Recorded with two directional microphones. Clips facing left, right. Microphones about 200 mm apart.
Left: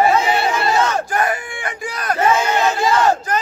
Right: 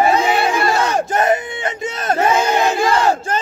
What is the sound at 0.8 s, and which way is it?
Battle cry, 20° right (ahead or behind).